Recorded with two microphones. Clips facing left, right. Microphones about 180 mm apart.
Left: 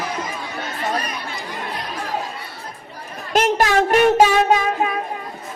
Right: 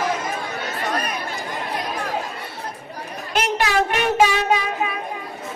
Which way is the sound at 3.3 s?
45° left (ahead or behind).